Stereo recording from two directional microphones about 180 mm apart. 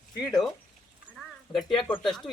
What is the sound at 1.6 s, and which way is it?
Speech, 5° left (ahead or behind).